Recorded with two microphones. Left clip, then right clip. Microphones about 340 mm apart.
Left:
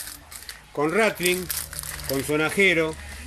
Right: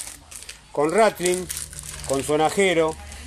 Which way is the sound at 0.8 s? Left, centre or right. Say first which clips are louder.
Right 3 dB; centre.